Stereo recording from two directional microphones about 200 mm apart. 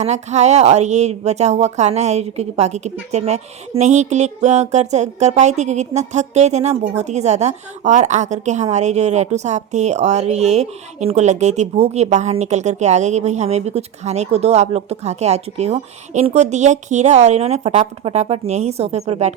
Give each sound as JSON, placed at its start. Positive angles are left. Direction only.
{"t": 0.0, "sound": "speech", "side_deg": -35}